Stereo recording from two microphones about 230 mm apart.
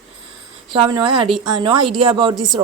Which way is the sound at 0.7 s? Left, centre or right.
Centre.